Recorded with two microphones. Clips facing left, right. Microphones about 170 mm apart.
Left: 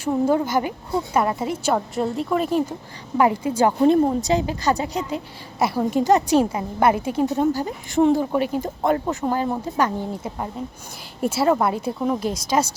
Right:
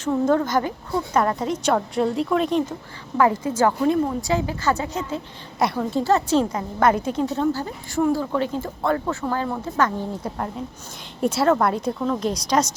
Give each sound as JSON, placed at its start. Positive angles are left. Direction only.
{"t": 0.0, "sound": "a woman's voice", "side_deg": 10}
{"t": 4.2, "sound": "a woman's voice", "side_deg": 20}
{"t": 5.5, "sound": "a woman's voice", "side_deg": 5}
{"t": 5.8, "sound": "a woman's voice", "side_deg": 15}
{"t": 12.3, "sound": "a woman's voice", "side_deg": 5}